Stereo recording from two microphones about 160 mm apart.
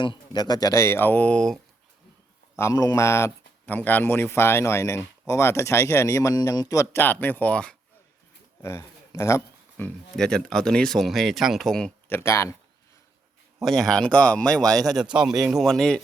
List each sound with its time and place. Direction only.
0.0 s speech: 30° left (ahead or behind); by 1.5 s 5° left (ahead or behind)
2.6 s speech: 20° left (ahead or behind)
8.6 s speech: 15° left (ahead or behind); by 11.9 s centre (ahead or behind)
12.0 s speech: 15° left (ahead or behind)
13.6 s speech: centre (ahead or behind)